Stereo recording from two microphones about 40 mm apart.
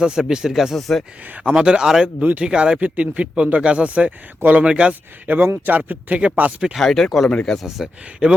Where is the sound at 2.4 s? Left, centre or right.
Right.